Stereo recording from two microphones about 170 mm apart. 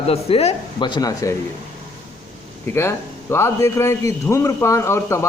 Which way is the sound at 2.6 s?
15° left (ahead or behind).